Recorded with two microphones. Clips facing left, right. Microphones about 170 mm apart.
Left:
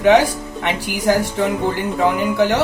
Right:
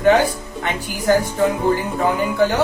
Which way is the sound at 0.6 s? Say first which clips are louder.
Left 1 dB; 80° left.